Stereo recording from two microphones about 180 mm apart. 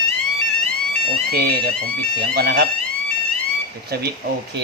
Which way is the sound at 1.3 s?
60° right (ahead or behind).